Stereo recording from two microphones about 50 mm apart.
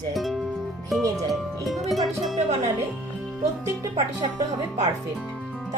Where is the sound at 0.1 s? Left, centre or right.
Centre.